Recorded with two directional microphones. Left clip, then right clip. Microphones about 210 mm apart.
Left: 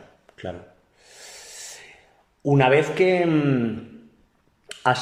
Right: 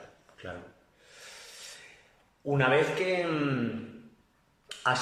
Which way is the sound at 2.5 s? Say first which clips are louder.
Left 7 dB; 40° left (ahead or behind).